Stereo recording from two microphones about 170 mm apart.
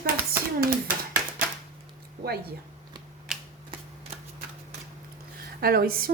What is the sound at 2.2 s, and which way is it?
Speech, 65° right (ahead or behind).